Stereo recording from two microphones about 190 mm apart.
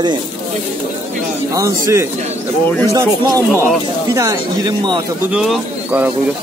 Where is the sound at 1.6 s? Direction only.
15° right (ahead or behind).